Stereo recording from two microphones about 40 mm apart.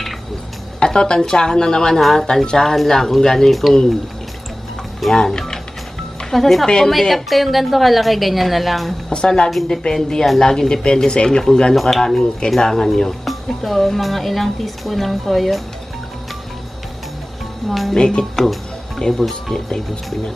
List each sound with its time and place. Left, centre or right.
0.7 s speech: left; by 3.7 s centre
5.1 s speech: centre
6.3 s a woman's voice: centre
9.1 s speech: left
11.7 s a woman's voice: centre
17.6 s a woman's voice: centre
17.9 s speech: left
18.3 s speech: centre